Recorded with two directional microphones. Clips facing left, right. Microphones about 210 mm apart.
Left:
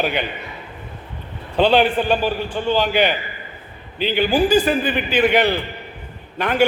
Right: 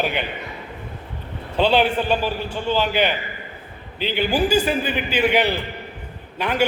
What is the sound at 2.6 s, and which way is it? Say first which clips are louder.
Speech: left 3 dB; 55° left (ahead or behind).